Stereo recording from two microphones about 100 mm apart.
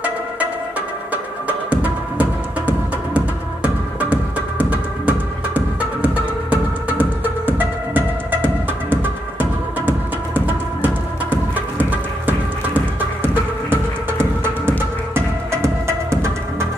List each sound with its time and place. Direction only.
0.0 s music: 15° right (ahead or behind)